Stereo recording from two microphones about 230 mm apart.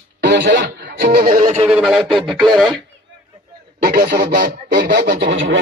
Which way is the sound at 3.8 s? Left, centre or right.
Right.